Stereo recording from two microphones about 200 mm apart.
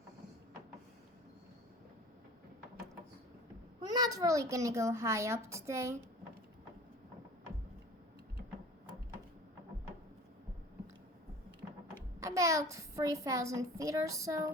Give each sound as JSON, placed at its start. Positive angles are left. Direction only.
{"t": 3.8, "sound": "a child's voice", "side_deg": -20}
{"t": 12.2, "sound": "a child's voice", "side_deg": -15}